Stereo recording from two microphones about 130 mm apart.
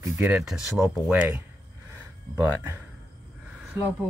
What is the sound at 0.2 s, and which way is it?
Speech, 5° right (ahead or behind).